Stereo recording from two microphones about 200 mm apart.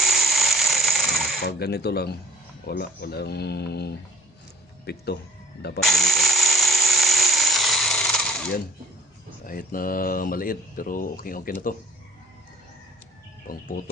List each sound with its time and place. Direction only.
0.0 s ratchet: centre (ahead or behind)
1.4 s speech: 55° left (ahead or behind)
5.8 s mechanisms: centre (ahead or behind)
9.5 s speech: 45° left (ahead or behind)
13.5 s speech: 45° left (ahead or behind)